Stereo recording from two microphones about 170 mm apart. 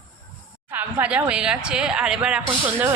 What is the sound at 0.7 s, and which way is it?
Speech, 10° right (ahead or behind).